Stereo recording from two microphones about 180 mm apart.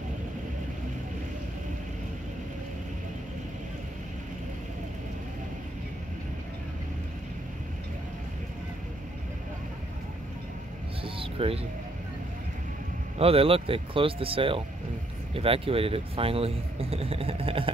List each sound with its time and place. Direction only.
11.1 s vehicle: 30° right (ahead or behind)
13.2 s speech: 30° right (ahead or behind)